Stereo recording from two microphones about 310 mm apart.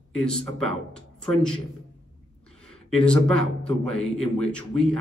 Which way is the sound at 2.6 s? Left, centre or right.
Centre.